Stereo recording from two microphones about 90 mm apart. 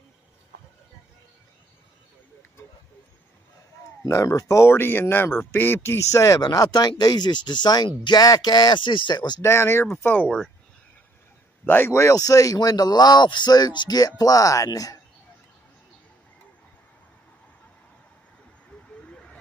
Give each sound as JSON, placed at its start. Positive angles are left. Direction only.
{"t": 4.0, "sound": "speech", "side_deg": 35}
{"t": 9.4, "sound": "speech", "side_deg": 30}
{"t": 11.6, "sound": "speech", "side_deg": 20}